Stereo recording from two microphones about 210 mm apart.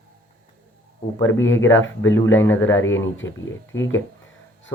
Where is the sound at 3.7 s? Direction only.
65° left (ahead or behind).